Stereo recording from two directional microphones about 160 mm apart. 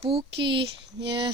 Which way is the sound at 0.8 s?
90° right.